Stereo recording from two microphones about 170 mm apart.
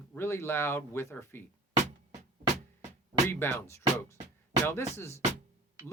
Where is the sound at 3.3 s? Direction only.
10° left (ahead or behind).